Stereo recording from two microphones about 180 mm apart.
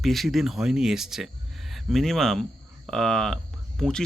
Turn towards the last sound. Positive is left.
turn(degrees=5)  # may be behind; listen again after turning